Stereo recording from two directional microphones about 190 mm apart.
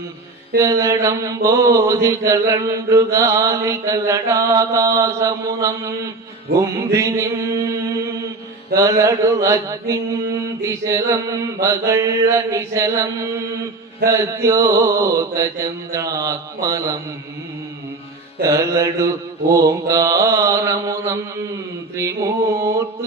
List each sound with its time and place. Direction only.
0.6 s mantra: 15° right (ahead or behind)
8.7 s mantra: 15° right (ahead or behind)
18.4 s mantra: 15° right (ahead or behind)